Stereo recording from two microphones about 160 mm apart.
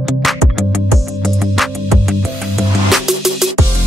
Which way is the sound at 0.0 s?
Centre (ahead or behind).